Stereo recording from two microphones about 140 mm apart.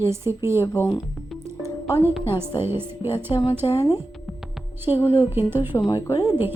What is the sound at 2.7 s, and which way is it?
Speech, 15° right (ahead or behind).